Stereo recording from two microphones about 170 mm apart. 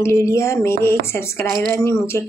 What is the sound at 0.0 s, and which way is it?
Speech, 15° left (ahead or behind).